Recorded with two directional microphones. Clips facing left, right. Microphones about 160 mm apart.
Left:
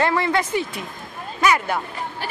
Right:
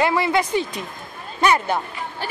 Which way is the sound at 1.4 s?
30° right (ahead or behind).